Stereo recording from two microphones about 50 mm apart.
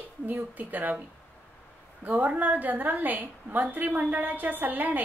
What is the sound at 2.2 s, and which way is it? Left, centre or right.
A woman's voice, right.